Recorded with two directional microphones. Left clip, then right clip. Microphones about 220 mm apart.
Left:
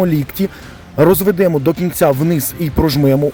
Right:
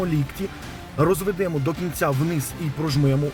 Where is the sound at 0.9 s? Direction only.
40° left (ahead or behind).